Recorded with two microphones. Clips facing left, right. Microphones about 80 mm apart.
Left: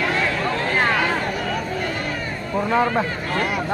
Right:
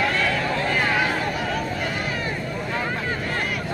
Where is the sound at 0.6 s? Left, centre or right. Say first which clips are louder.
Left 5 dB; left.